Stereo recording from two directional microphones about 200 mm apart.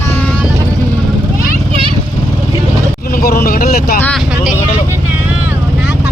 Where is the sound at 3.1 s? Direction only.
50° left (ahead or behind).